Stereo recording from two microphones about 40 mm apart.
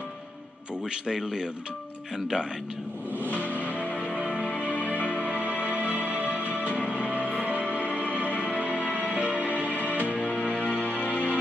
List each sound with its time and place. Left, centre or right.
1.0 s a man's voice: right
3.5 s music: right
4.6 s music: left
5.7 s music: right
7.6 s music: left
9.1 s music: right
9.7 s music: left